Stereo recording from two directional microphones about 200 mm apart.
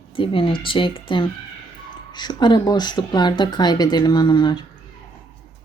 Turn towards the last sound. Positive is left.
turn(degrees=20)  # may be behind; listen again after turning